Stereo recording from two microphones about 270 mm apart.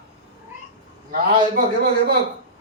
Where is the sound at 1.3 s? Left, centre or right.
Right.